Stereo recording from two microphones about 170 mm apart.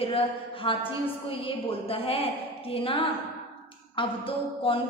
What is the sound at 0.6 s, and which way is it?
A woman's voice, 30° left (ahead or behind).